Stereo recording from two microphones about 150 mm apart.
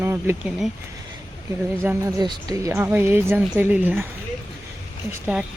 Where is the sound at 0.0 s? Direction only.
15° right (ahead or behind).